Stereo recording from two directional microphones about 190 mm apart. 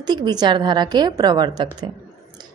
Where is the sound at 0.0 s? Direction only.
20° right (ahead or behind).